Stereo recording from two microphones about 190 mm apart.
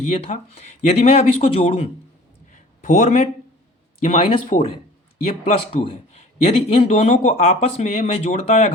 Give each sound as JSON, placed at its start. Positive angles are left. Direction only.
{"t": 0.1, "sound": "a man's voice", "side_deg": 35}
{"t": 2.5, "sound": "a sound", "side_deg": 40}
{"t": 4.0, "sound": "a man's voice", "side_deg": 35}